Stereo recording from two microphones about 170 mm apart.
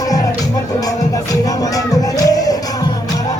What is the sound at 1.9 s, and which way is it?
Music, 20° left (ahead or behind).